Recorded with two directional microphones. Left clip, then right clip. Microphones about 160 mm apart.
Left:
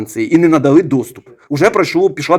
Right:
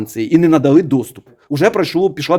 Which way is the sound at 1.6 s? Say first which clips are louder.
Left 2 dB; 40° right (ahead or behind).